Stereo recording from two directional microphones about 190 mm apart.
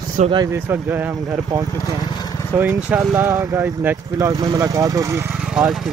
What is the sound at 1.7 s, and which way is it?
Vehicle, 15° left (ahead or behind).